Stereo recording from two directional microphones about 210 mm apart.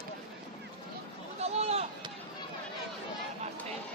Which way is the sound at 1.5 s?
30° right (ahead or behind).